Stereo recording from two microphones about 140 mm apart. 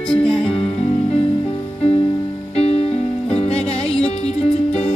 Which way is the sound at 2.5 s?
45° left (ahead or behind).